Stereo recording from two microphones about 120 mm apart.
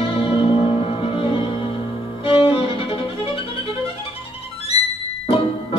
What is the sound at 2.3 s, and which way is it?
Violin, 50° left (ahead or behind).